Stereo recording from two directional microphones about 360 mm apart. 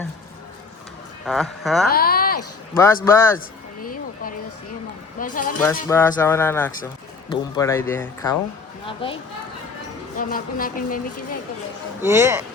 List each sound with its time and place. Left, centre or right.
1.2 s speech: centre
1.9 s speech: left
2.7 s speech: centre
3.8 s a sound: left
5.2 s speech: left
5.9 s speech: centre
10.2 s speech: left
12.0 s speech: centre